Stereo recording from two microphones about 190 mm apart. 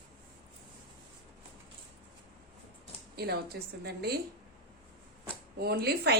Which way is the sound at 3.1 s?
55° right (ahead or behind).